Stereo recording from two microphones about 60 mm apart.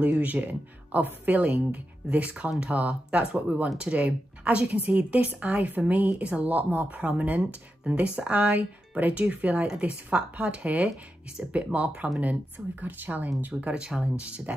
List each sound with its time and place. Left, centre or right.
0.0 s speech: right